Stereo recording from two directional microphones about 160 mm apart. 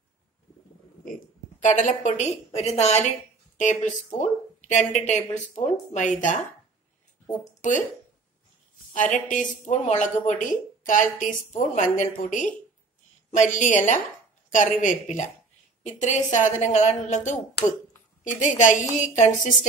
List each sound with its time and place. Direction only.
1.6 s a woman's voice: 50° left (ahead or behind)
8.9 s a woman's voice: 55° left (ahead or behind)